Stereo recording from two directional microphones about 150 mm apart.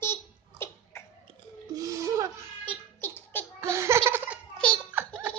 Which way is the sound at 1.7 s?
20° right (ahead or behind).